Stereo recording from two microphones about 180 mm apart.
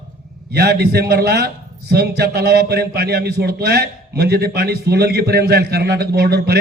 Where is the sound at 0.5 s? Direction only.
60° right (ahead or behind).